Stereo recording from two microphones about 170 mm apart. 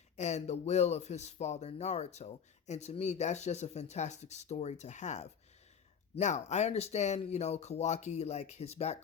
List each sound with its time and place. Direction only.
0.2 s speech: 40° left (ahead or behind)